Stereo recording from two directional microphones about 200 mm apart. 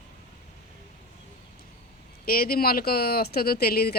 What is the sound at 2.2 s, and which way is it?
Speech, 50° left (ahead or behind).